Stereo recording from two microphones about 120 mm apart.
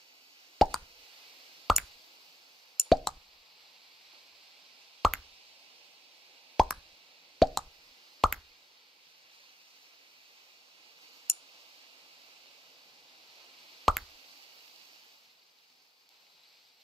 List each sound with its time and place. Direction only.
0.6 s plop: centre (ahead or behind)
5.0 s plop: centre (ahead or behind)
6.5 s plop: centre (ahead or behind)
13.9 s plop: centre (ahead or behind)